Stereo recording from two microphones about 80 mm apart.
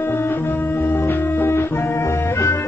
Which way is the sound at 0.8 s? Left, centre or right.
Left.